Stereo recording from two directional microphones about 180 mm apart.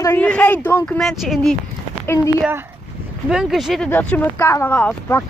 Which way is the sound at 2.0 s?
15° left (ahead or behind).